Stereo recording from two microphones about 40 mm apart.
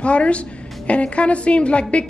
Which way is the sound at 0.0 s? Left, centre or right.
Left.